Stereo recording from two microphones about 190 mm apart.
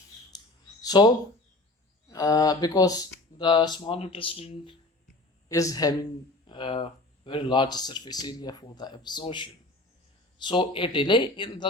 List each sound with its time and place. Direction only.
0.3 s a sound: 20° left (ahead or behind)
2.0 s speech: 20° left (ahead or behind)
5.5 s speech: 15° left (ahead or behind)